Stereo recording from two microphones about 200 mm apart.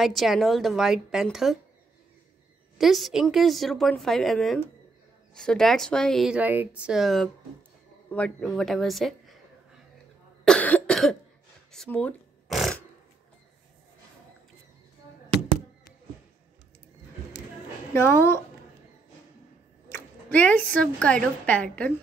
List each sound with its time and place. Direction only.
0.0 s speech: centre (ahead or behind)
2.8 s speech: centre (ahead or behind)
10.4 s cough: 5° left (ahead or behind)
11.7 s a sound: 5° left (ahead or behind)
17.9 s a woman's voice: 10° left (ahead or behind)
20.2 s a woman's voice: 10° left (ahead or behind)